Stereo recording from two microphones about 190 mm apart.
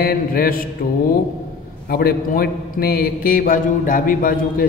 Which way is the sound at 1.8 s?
50° left (ahead or behind).